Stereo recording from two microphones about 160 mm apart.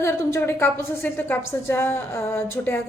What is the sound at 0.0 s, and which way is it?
A woman's voice, 15° left (ahead or behind).